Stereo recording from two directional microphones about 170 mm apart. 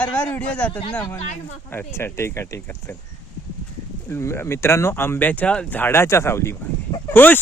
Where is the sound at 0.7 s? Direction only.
30° left (ahead or behind).